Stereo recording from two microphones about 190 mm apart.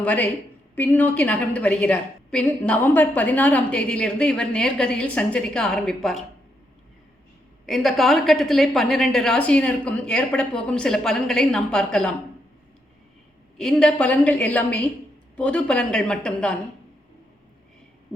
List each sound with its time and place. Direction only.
0.0 s a woman's voice: 10° left (ahead or behind)
7.7 s a woman's voice: centre (ahead or behind)
13.6 s a woman's voice: 5° left (ahead or behind)